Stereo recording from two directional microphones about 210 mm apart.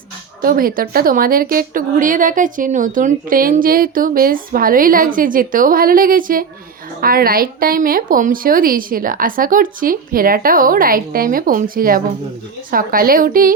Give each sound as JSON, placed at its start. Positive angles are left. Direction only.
{"t": 0.4, "sound": "a woman's voice", "side_deg": -45}